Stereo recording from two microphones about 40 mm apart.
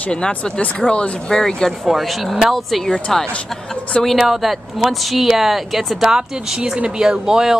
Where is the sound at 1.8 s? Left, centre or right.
Centre.